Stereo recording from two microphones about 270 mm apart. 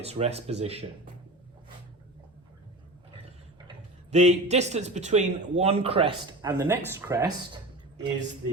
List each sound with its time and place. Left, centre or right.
0.0 s speech: right
4.1 s speech: right